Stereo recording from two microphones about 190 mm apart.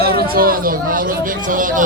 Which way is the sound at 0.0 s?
55° right (ahead or behind).